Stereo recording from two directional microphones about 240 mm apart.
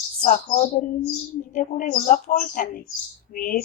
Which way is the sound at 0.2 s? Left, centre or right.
Left.